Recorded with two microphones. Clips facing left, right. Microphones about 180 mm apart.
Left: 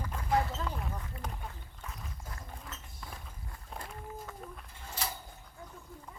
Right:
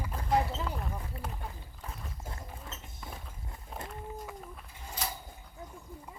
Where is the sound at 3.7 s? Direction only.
Centre (ahead or behind).